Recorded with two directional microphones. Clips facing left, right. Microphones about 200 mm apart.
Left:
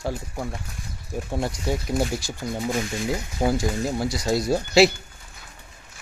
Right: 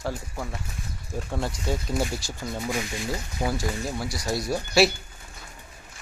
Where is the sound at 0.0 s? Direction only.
15° left (ahead or behind).